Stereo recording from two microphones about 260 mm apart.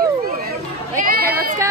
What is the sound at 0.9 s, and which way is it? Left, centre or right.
Speech, right.